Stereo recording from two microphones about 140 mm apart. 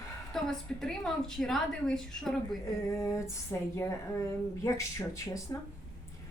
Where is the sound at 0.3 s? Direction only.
5° left (ahead or behind).